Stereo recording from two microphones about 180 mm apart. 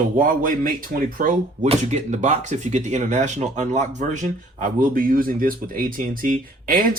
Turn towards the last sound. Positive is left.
turn(degrees=-50)  # may be behind; listen again after turning